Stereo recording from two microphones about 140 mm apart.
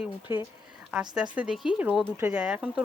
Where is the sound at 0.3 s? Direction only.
15° right (ahead or behind).